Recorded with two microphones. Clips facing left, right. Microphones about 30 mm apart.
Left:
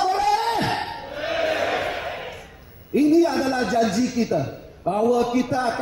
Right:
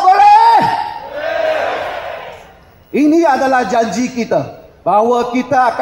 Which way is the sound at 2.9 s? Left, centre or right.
Right.